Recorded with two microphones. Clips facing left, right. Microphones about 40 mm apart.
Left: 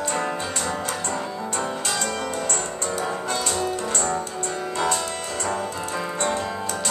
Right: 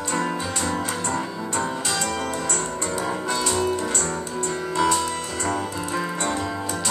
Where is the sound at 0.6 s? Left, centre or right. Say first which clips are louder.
Right 1 dB; centre.